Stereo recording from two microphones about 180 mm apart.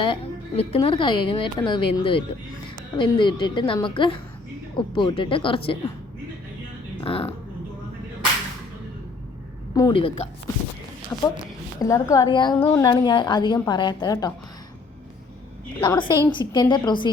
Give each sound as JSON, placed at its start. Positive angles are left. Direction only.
{"t": 0.0, "sound": "a woman's voice", "side_deg": 30}
{"t": 7.0, "sound": "speech", "side_deg": 30}
{"t": 9.7, "sound": "a woman's voice", "side_deg": 25}
{"t": 11.1, "sound": "a woman's voice", "side_deg": 15}
{"t": 12.5, "sound": "speech", "side_deg": 10}
{"t": 12.8, "sound": "a woman's voice", "side_deg": 25}
{"t": 15.8, "sound": "a woman's voice", "side_deg": 25}